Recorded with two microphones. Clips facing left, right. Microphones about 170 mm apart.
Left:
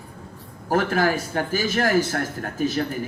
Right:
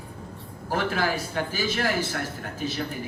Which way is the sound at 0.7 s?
45° left (ahead or behind).